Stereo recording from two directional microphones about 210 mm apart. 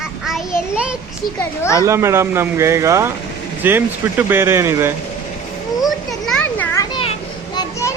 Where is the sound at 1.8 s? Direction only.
15° right (ahead or behind).